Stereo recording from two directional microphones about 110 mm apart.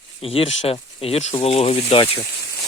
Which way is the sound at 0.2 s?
60° left (ahead or behind).